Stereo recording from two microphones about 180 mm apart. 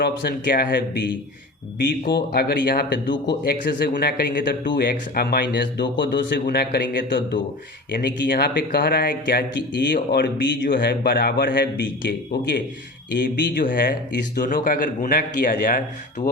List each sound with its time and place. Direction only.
0.0 s a man's voice: 65° left (ahead or behind)
1.8 s a man's voice: 70° left (ahead or behind)
6.4 s a man's voice: 60° left (ahead or behind)
7.9 s a man's voice: 55° left (ahead or behind)
14.4 s speech: 50° left (ahead or behind)